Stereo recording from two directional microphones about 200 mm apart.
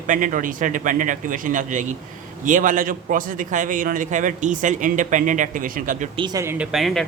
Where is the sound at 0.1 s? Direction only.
40° right (ahead or behind).